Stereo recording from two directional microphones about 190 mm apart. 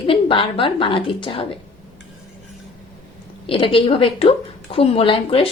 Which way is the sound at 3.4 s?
25° left (ahead or behind).